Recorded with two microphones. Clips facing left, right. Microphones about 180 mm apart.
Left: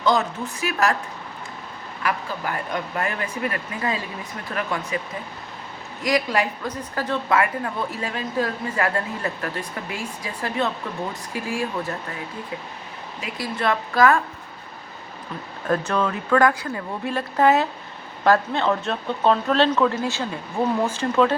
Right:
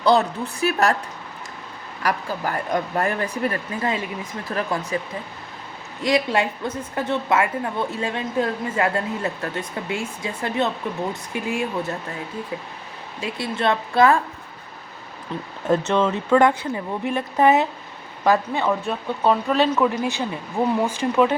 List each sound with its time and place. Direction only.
0.0 s speech: 35° right (ahead or behind)
2.0 s speech: 40° right (ahead or behind); by 4.3 s 25° right (ahead or behind)
4.5 s speech: 35° right (ahead or behind)
6.0 s a woman's voice: 25° right (ahead or behind)
13.2 s a woman's voice: 25° right (ahead or behind)
15.7 s a woman's voice: 25° right (ahead or behind)